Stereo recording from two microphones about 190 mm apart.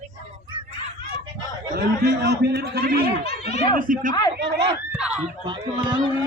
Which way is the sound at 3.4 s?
35° left (ahead or behind).